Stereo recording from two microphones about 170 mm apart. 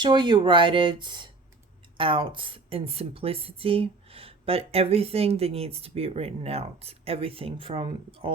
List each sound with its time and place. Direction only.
0.0 s speech: 25° right (ahead or behind)